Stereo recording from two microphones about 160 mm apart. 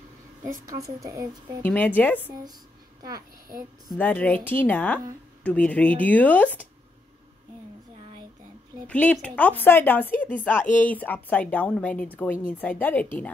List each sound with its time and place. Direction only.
0.7 s a woman's voice: 20° right (ahead or behind)
1.6 s a woman's voice: 10° left (ahead or behind)
3.0 s a child's voice: 25° right (ahead or behind)
4.0 s a woman's voice: 10° left (ahead or behind)
8.8 s a woman's voice: 10° left (ahead or behind)